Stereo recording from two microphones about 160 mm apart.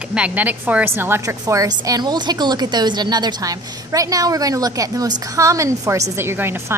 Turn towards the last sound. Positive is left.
turn(degrees=-15)  # may be behind; listen again after turning